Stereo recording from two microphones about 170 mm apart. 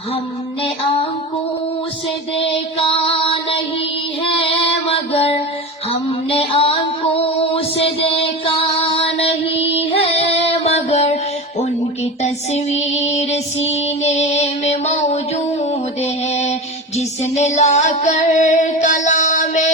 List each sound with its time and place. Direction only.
2.5 s music: 35° left (ahead or behind)
12.2 s music: 40° left (ahead or behind)